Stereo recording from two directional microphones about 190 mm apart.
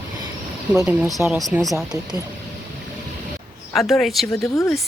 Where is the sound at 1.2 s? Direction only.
Centre (ahead or behind).